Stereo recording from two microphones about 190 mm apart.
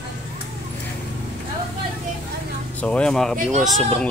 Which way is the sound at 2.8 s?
5° left (ahead or behind).